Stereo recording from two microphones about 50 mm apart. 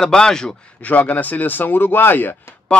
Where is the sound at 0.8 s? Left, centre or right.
Left.